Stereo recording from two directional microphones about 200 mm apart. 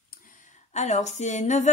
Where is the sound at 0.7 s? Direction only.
35° left (ahead or behind).